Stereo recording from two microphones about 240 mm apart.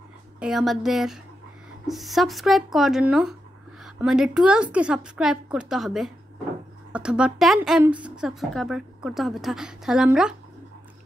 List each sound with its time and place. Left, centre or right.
0.4 s a woman's voice: centre